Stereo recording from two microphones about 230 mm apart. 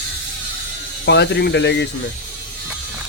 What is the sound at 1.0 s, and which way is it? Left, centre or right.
Speech, left.